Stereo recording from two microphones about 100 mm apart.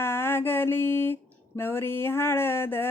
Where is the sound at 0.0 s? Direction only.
25° left (ahead or behind).